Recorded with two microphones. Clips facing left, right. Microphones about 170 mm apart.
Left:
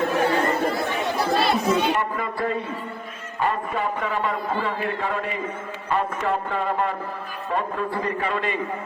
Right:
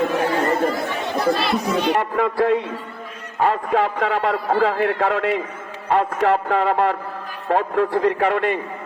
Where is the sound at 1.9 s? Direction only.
75° right (ahead or behind).